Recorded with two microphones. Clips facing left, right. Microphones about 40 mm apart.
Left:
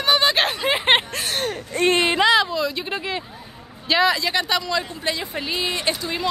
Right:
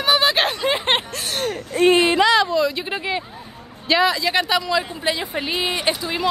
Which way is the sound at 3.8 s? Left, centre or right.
Centre.